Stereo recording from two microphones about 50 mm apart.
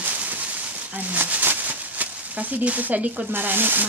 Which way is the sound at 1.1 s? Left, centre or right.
Right.